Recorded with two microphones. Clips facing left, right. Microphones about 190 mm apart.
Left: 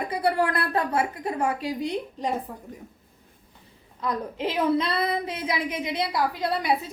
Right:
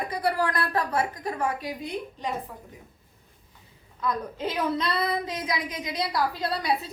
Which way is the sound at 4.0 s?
30° left (ahead or behind).